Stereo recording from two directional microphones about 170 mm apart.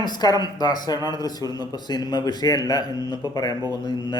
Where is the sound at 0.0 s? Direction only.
25° left (ahead or behind).